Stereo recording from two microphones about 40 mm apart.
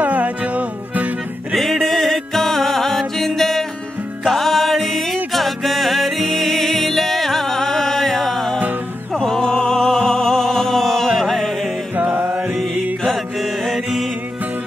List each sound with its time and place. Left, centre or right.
0.0 s music: right
1.5 s music: centre
12.0 s music: right
13.0 s mantra: centre